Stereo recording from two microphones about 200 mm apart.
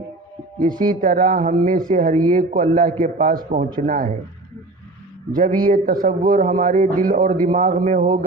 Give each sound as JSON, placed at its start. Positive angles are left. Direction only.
{"t": 0.9, "sound": "speech", "side_deg": -40}
{"t": 5.5, "sound": "speech", "side_deg": -40}